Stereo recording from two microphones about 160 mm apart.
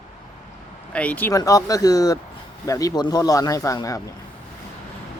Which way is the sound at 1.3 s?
20° left (ahead or behind).